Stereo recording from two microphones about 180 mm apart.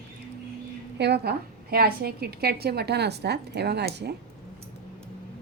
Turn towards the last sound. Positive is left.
turn(degrees=-65)  # may be behind; listen again after turning